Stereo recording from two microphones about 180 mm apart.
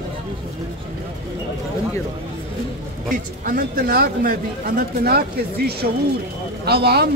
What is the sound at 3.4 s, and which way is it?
Speech, 55° right (ahead or behind).